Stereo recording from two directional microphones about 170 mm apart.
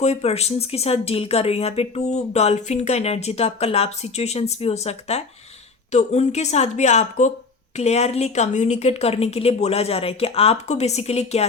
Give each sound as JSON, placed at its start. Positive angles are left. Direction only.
{"t": 0.0, "sound": "speech", "side_deg": 40}